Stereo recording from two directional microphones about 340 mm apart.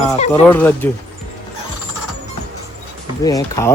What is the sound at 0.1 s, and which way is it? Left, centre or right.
Speech, centre.